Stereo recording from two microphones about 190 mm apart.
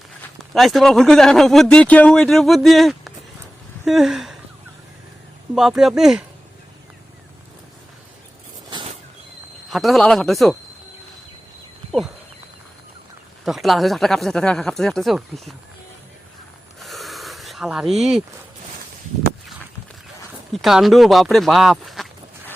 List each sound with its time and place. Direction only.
0.5 s speech: centre (ahead or behind)
5.5 s speech: centre (ahead or behind)
8.7 s a sound: 25° right (ahead or behind)
9.6 s speech: centre (ahead or behind)
13.4 s speech: centre (ahead or behind)
16.8 s a sound: centre (ahead or behind)
20.5 s speech: centre (ahead or behind)